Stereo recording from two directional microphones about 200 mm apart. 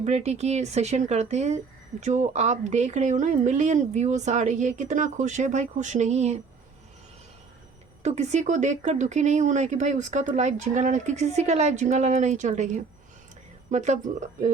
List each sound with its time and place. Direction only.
0.0 s speech: 35° right (ahead or behind)
8.0 s speech: 35° right (ahead or behind)